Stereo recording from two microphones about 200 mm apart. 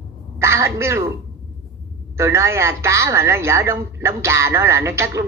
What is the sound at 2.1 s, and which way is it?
A woman's voice, 15° right (ahead or behind).